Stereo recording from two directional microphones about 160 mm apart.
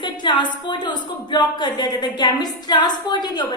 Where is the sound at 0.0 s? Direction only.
30° left (ahead or behind).